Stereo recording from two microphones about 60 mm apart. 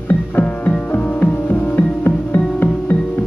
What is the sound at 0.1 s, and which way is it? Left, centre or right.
Music, left.